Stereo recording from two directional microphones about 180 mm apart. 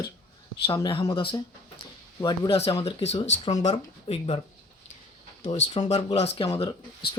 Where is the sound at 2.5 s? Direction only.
35° left (ahead or behind).